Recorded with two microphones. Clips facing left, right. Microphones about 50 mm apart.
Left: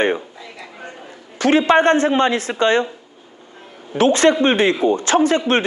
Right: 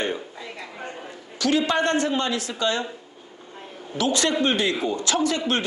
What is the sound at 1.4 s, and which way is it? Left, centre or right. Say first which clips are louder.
Speech: left 8 dB; left.